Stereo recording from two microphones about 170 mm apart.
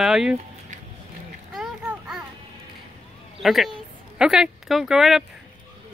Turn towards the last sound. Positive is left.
turn(degrees=0)  # may be behind; listen again after turning